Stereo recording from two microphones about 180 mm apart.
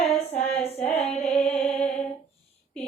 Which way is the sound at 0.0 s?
35° left (ahead or behind).